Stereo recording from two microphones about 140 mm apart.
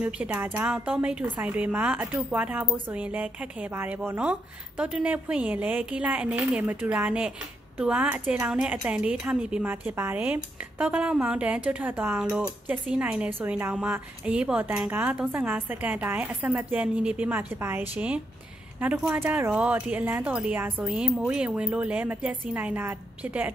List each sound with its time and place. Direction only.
0.0 s speech: 10° right (ahead or behind)